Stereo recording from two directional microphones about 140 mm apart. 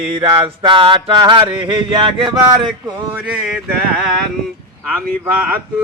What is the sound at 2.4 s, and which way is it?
Male singing, 25° right (ahead or behind).